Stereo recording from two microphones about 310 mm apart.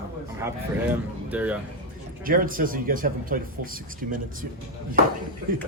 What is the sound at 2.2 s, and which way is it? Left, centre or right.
Speech, right.